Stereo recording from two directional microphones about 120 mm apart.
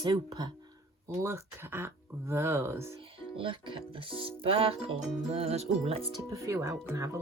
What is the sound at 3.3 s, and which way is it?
Music, 45° right (ahead or behind).